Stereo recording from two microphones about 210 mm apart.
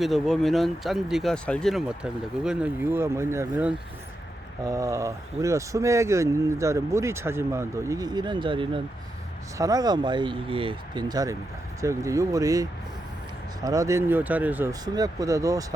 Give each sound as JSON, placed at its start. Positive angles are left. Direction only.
{"t": 0.0, "sound": "speech", "side_deg": 0}
{"t": 13.7, "sound": "speech", "side_deg": -15}